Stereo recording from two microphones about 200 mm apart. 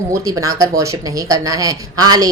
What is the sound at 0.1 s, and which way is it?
Speech, 15° right (ahead or behind).